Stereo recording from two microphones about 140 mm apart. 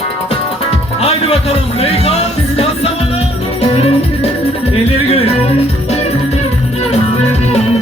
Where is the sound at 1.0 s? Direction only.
45° left (ahead or behind).